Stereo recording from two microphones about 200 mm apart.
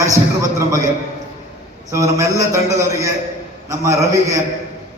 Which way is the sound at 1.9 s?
15° right (ahead or behind).